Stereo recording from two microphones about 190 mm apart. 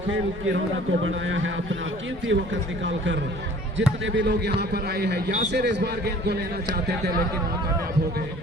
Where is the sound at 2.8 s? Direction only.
75° right (ahead or behind); by 7.1 s 55° right (ahead or behind).